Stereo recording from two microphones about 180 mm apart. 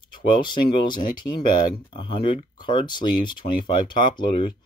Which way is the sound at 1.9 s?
30° left (ahead or behind).